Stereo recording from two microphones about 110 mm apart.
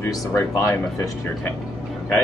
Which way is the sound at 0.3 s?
15° left (ahead or behind).